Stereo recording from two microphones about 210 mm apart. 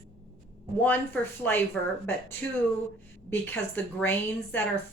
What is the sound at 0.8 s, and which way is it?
A woman's voice, 10° left (ahead or behind).